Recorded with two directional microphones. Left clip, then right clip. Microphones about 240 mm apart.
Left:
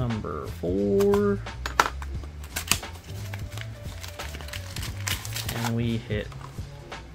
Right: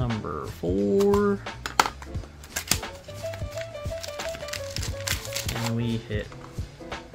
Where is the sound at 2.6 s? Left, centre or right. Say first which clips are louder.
Left 1 dB; centre.